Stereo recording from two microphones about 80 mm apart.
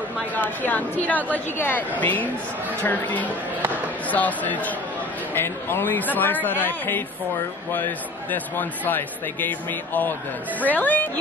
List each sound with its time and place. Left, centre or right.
0.4 s a man's voice: left